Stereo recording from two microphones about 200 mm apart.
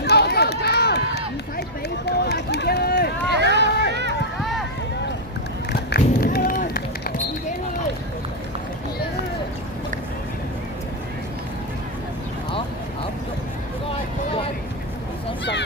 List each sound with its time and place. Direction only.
0.0 s run: 55° left (ahead or behind)
3.3 s a sound: 60° right (ahead or behind)
3.7 s run: 55° left (ahead or behind)
5.9 s run: 50° left (ahead or behind)